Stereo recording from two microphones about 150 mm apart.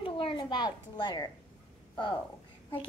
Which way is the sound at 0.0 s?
35° left (ahead or behind).